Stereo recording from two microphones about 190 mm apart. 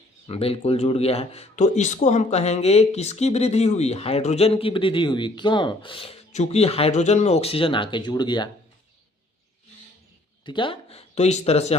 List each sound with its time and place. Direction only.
0.3 s speech: 30° left (ahead or behind)
10.4 s speech: 25° left (ahead or behind)